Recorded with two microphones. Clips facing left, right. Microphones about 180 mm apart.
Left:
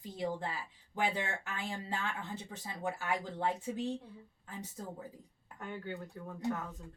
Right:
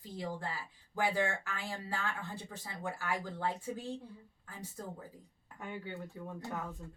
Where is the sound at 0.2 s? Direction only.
20° left (ahead or behind).